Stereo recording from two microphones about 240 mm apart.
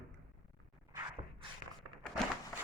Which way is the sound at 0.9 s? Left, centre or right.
Centre.